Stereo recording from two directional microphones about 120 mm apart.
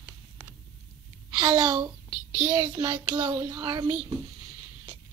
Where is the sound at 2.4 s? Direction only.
35° right (ahead or behind).